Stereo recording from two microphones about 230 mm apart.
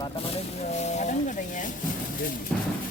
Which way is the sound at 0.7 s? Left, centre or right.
Left.